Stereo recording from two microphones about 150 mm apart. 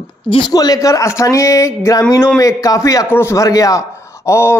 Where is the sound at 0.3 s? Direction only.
30° left (ahead or behind).